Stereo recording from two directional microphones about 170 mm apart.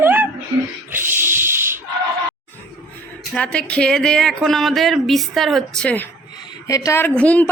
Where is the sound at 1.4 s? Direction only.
15° right (ahead or behind).